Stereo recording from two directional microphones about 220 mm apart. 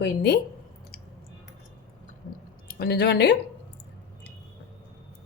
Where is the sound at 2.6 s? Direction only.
45° left (ahead or behind).